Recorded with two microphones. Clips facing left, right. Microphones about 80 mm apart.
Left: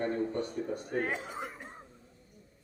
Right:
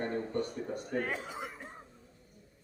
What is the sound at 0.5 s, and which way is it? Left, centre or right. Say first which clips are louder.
Speech: left 2 dB; left.